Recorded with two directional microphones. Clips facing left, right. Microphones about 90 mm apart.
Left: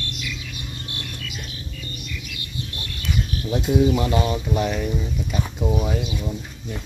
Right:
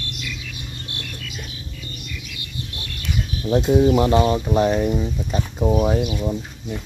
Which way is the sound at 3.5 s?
35° right (ahead or behind).